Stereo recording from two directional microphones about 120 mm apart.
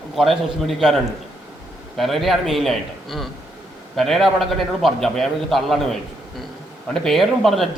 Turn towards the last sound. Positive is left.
turn(degrees=0)  # may be behind; listen again after turning